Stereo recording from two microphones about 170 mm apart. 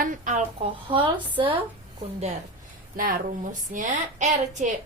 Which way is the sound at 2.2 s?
40° right (ahead or behind).